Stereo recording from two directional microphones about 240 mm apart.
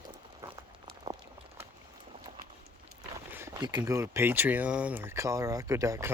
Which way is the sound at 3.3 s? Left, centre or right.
Centre.